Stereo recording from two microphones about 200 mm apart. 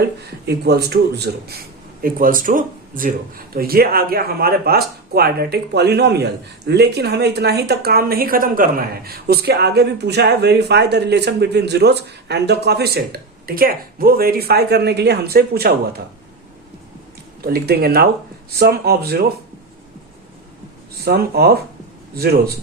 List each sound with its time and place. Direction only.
0.0 s speech: 55° right (ahead or behind)
17.4 s speech: 50° right (ahead or behind)
21.0 s speech: 50° right (ahead or behind)